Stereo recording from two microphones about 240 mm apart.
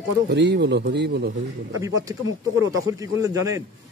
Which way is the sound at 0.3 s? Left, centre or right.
Right.